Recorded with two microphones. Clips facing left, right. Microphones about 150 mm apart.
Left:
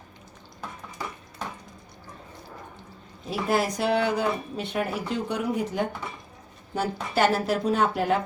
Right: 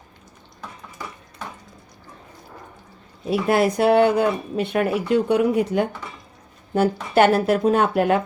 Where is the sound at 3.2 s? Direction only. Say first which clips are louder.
Right 6 dB; 65° right (ahead or behind).